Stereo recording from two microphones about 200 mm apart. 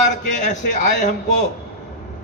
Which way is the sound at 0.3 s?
40° left (ahead or behind).